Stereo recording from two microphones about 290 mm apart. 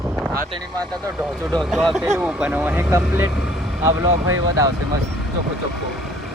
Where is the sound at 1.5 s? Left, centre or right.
Centre.